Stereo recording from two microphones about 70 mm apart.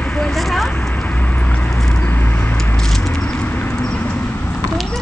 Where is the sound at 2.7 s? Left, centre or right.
Centre.